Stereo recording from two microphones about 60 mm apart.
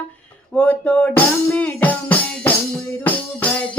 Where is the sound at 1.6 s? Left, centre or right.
Left.